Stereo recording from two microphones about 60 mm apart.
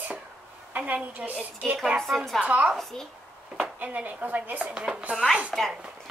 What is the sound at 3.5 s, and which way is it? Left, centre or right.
Speech, right.